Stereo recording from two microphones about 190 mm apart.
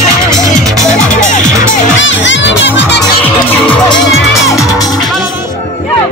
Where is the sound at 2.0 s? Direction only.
75° left (ahead or behind).